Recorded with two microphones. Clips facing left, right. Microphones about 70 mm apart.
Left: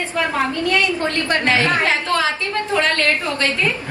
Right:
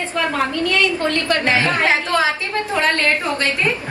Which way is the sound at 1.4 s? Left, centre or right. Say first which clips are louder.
Left 1 dB; centre.